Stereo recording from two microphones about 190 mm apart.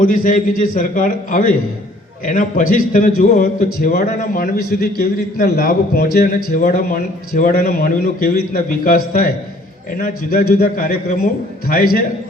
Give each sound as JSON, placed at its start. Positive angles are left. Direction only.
{"t": 0.0, "sound": "a man's voice", "side_deg": 45}
{"t": 10.0, "sound": "a man's voice", "side_deg": 50}